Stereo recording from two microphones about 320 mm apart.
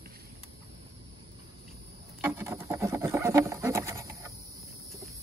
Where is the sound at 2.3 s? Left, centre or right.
Centre.